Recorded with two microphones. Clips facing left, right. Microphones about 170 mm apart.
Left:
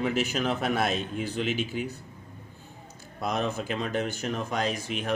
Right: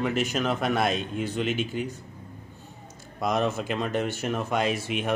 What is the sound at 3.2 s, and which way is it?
Speech, centre (ahead or behind).